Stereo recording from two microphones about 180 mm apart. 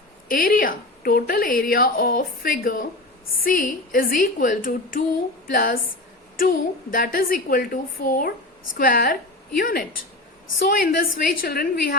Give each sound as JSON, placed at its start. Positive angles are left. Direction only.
{"t": 0.3, "sound": "a woman's voice", "side_deg": 50}